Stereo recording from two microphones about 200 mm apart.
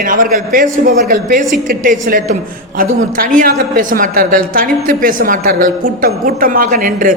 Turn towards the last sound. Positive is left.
turn(degrees=-45)  # may be behind; listen again after turning